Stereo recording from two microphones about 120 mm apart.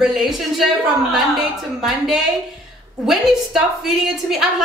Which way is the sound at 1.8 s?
5° right (ahead or behind).